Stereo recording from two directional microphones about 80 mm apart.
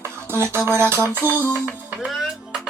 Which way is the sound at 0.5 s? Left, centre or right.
Right.